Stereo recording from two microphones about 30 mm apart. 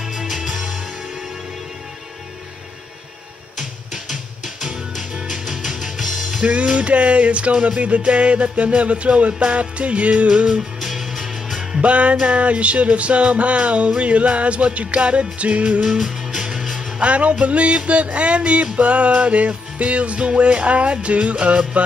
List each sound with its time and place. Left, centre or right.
0.0 s music: centre
3.5 s music: right
6.4 s music: right
10.4 s music: right
11.8 s music: right
15.8 s music: centre
17.0 s music: right